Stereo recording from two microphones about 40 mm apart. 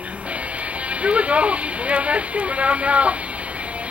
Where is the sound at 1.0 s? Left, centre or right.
Right.